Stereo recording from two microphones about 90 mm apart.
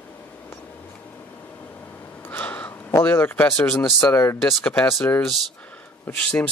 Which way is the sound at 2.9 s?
25° left (ahead or behind).